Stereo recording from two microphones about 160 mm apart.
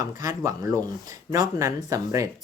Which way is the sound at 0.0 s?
20° right (ahead or behind).